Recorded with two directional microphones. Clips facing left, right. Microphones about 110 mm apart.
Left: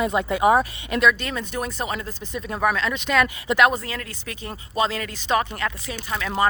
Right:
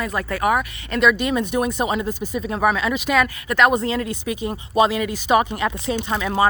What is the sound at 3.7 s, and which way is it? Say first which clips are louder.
Speech: right 9 dB; 20° right (ahead or behind).